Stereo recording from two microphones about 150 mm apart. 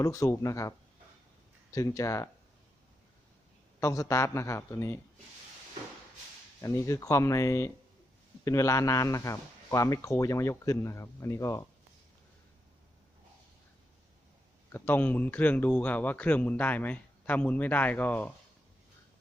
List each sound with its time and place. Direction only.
0.0 s a man's voice: 20° left (ahead or behind)
1.7 s a man's voice: 20° left (ahead or behind)
3.8 s a man's voice: 20° left (ahead or behind)
6.6 s a man's voice: 20° left (ahead or behind)
14.7 s a man's voice: 10° left (ahead or behind)